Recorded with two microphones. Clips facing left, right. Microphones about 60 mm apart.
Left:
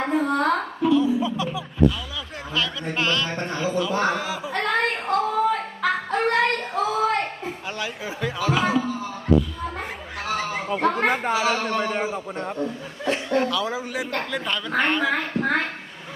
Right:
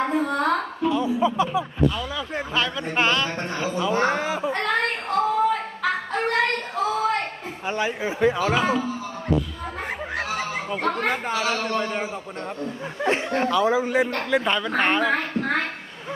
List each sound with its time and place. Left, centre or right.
0.0 s a woman's voice: centre
0.4 s a sound: centre
0.9 s a sound: right
1.2 s speech: right
2.9 s speech: right
3.2 s music: centre
3.8 s speech: right
4.6 s a sound: centre
7.7 s speech: right
8.6 s speech: centre
10.2 s speech: centre
13.0 s speech: right; by 15.0 s centre
15.3 s a sound: centre